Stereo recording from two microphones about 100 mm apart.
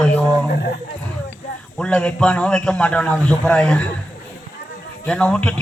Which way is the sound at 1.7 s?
10° left (ahead or behind).